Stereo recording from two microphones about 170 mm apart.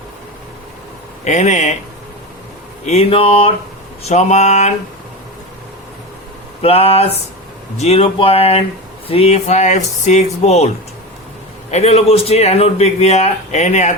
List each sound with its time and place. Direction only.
1.2 s speech: 45° left (ahead or behind)
2.8 s a man's voice: 40° left (ahead or behind)
4.0 s speech: 40° left (ahead or behind)
6.6 s a man's voice: 35° left (ahead or behind)
11.7 s a man's voice: 40° left (ahead or behind)